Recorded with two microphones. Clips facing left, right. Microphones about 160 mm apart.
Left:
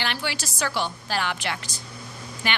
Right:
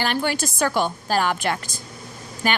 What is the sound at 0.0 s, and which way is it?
A woman's voice, 45° right (ahead or behind).